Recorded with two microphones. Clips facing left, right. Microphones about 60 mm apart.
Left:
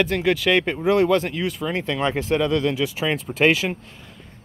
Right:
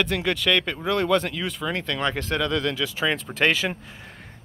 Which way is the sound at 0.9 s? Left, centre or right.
Centre.